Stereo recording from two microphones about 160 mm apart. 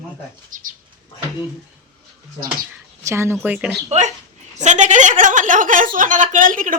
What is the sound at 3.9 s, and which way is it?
A woman's voice, 45° right (ahead or behind).